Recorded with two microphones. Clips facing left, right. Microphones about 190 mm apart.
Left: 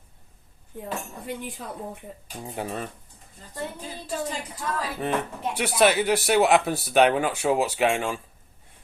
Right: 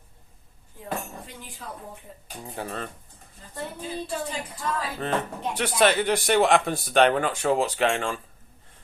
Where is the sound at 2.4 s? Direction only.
15° left (ahead or behind).